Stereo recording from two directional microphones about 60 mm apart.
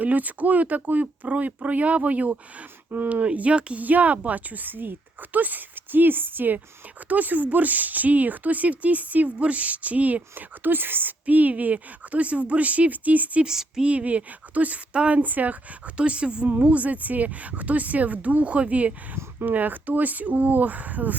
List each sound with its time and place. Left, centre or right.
0.0 s speech: right
13.4 s speech: centre
13.9 s speech: right
16.0 s speech: centre
19.1 s speech: right